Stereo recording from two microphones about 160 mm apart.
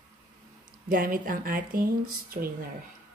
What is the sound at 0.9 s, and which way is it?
Speech, 60° right (ahead or behind).